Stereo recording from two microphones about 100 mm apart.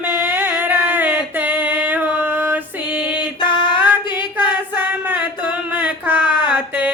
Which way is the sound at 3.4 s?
50° left (ahead or behind).